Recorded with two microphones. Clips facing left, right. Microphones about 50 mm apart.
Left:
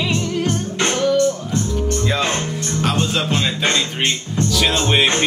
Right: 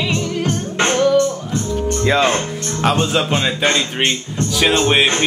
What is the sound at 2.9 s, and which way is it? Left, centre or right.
Music, centre.